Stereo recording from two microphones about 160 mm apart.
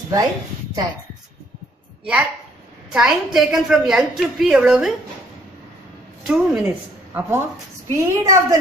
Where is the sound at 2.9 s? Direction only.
5° right (ahead or behind).